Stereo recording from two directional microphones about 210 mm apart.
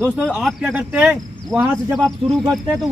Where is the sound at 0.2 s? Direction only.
Centre (ahead or behind).